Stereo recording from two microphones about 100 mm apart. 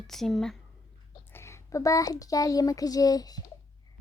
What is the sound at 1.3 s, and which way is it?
A child's voice, 25° left (ahead or behind).